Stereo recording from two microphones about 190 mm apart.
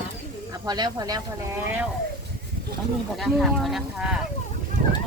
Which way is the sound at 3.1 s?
Centre (ahead or behind).